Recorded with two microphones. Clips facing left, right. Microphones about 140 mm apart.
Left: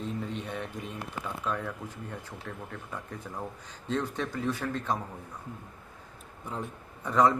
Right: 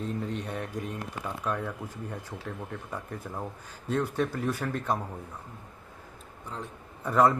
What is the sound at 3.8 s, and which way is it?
A man's voice, 10° right (ahead or behind).